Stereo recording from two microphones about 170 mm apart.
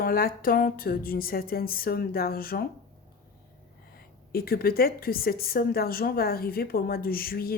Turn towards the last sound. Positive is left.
turn(degrees=60)  # may be behind; listen again after turning